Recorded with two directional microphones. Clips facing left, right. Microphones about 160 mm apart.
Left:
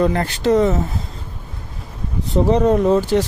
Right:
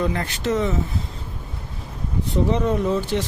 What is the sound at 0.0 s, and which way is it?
Speech, 40° left (ahead or behind).